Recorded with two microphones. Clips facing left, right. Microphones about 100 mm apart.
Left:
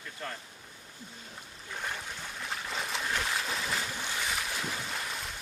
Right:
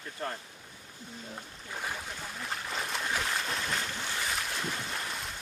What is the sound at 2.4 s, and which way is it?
Boat, centre (ahead or behind).